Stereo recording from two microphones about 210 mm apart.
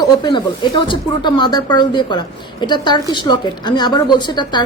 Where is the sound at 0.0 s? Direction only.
20° left (ahead or behind).